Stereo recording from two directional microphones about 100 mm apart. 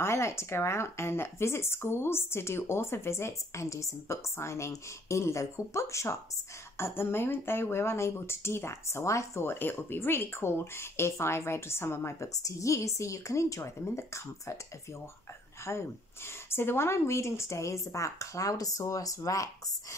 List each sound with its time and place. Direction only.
0.0 s speech: 30° left (ahead or behind)